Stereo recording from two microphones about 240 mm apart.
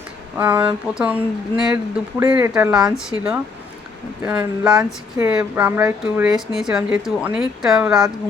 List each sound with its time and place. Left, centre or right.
0.3 s speech: centre